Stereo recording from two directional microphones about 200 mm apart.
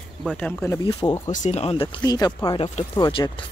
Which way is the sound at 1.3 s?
35° left (ahead or behind).